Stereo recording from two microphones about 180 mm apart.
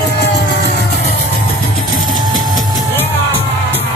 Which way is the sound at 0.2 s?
70° left (ahead or behind).